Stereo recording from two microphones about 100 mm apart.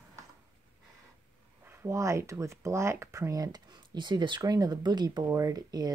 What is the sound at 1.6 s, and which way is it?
Speech, 25° right (ahead or behind).